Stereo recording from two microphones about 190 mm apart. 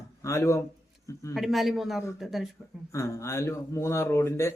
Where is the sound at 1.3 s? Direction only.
Centre (ahead or behind).